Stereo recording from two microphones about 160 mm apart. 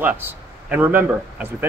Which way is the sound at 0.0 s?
10° right (ahead or behind).